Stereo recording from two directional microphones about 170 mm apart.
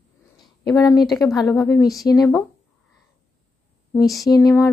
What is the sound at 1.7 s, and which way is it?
Speech, 20° left (ahead or behind).